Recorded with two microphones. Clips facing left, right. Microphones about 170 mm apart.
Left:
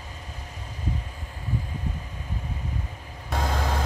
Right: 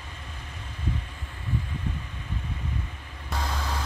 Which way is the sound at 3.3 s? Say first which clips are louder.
Left 4 dB; 50° left (ahead or behind).